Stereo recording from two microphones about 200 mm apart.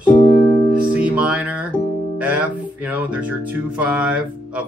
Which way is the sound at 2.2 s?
5° right (ahead or behind).